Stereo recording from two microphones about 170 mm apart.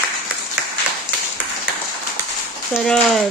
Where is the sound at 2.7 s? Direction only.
5° left (ahead or behind).